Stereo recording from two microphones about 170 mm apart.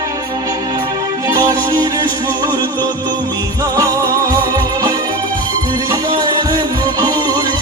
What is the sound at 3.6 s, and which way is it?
Music, 20° right (ahead or behind).